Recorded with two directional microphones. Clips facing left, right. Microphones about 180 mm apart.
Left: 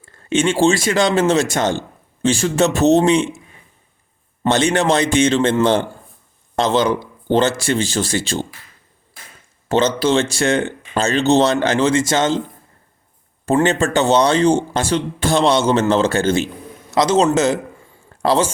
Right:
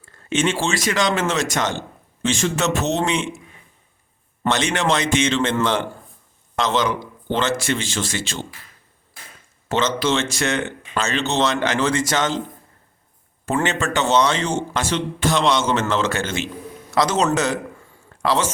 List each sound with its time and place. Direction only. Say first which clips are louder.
0.3 s speech: left 6 dB; 30° left (ahead or behind)
4.5 s a man's voice: left 5 dB; 35° left (ahead or behind)
9.6 s speech: left 4 dB; 35° left (ahead or behind)
13.4 s speech: left 6 dB; 35° left (ahead or behind)
16.9 s a man's voice: left 4 dB; 25° left (ahead or behind)